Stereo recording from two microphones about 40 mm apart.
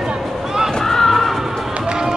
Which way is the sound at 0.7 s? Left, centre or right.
Centre.